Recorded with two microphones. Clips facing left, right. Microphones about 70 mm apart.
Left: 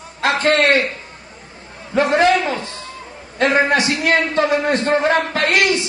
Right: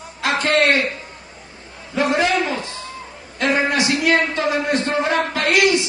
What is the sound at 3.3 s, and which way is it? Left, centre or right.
A man's voice, left.